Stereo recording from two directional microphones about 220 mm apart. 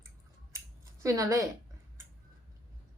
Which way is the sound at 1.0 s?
15° right (ahead or behind).